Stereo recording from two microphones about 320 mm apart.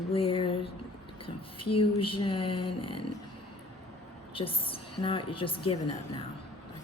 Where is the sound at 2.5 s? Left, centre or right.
Left.